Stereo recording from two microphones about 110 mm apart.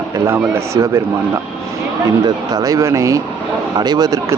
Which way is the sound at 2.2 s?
35° right (ahead or behind).